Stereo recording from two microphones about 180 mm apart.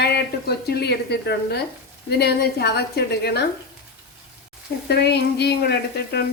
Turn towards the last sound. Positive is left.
turn(degrees=65)  # may be behind; listen again after turning